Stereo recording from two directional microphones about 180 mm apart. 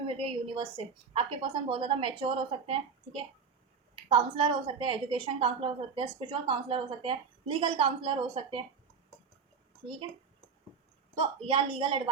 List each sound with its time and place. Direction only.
0.0 s a woman's voice: 30° right (ahead or behind)
11.1 s a woman's voice: 30° right (ahead or behind)